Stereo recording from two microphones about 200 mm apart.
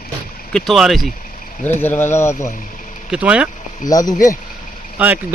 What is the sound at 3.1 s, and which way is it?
Speech, 5° right (ahead or behind).